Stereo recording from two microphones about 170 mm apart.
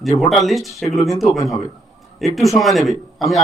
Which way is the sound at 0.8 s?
40° left (ahead or behind).